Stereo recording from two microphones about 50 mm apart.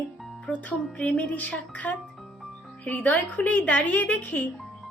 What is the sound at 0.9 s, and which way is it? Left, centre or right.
A woman's voice, left.